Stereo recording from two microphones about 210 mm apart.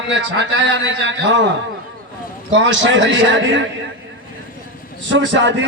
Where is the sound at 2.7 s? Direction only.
60° right (ahead or behind).